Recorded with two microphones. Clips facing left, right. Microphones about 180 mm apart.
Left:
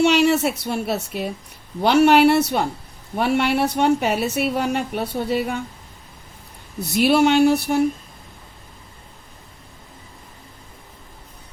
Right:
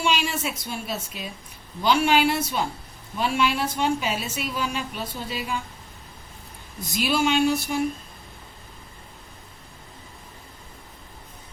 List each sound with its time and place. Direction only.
0.0 s a woman's voice: 70° left (ahead or behind)
6.7 s a woman's voice: 65° left (ahead or behind)